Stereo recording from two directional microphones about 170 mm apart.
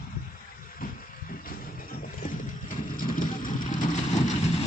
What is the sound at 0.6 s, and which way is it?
Vehicle, 55° left (ahead or behind).